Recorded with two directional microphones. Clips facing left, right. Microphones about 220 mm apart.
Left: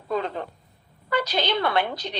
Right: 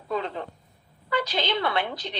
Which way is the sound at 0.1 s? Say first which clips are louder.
Left 2 dB; 45° left (ahead or behind).